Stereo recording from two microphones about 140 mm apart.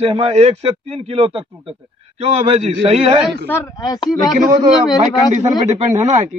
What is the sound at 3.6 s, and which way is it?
Speech, 30° left (ahead or behind).